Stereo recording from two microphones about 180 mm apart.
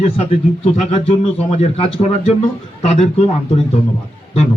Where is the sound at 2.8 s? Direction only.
35° left (ahead or behind).